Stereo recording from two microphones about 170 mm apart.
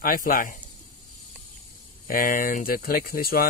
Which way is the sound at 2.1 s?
55° left (ahead or behind).